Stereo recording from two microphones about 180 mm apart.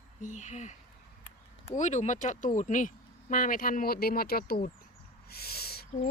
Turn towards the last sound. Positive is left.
turn(degrees=60)  # may be behind; listen again after turning